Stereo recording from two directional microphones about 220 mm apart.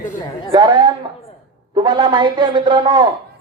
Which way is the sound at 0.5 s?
20° right (ahead or behind).